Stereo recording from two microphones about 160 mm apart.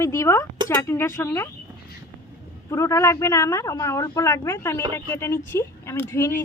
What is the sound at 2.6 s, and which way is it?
A woman's voice, 20° left (ahead or behind).